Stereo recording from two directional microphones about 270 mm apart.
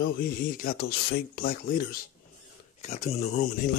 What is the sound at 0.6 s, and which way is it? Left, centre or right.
Speech, left.